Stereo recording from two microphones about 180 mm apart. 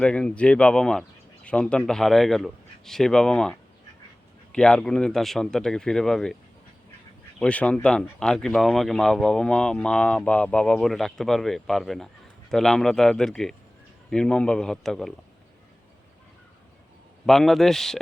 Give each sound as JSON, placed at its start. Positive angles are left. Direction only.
{"t": 0.0, "sound": "speech", "side_deg": 5}
{"t": 4.5, "sound": "speech", "side_deg": 5}
{"t": 7.3, "sound": "speech", "side_deg": 5}
{"t": 17.2, "sound": "speech", "side_deg": 0}